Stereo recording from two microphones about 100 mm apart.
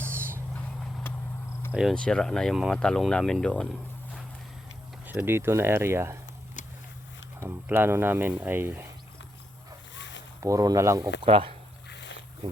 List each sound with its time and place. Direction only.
0.0 s vehicle: 25° right (ahead or behind)
1.7 s speech: 5° right (ahead or behind)
2.0 s speech: 10° left (ahead or behind)
5.0 s speech: 20° right (ahead or behind)
7.3 s speech: 20° right (ahead or behind)
10.4 s speech: 35° right (ahead or behind)
11.2 s speech: 65° right (ahead or behind)